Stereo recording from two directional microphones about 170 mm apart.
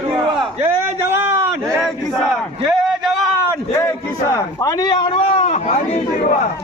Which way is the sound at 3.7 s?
15° left (ahead or behind).